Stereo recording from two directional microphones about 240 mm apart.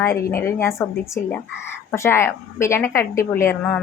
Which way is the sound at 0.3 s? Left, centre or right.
Centre.